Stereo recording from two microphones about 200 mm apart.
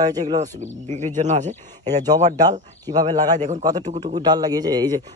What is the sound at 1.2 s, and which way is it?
Speech, 35° right (ahead or behind).